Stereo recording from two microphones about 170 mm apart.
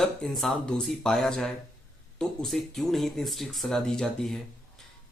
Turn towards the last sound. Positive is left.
turn(degrees=0)  # may be behind; listen again after turning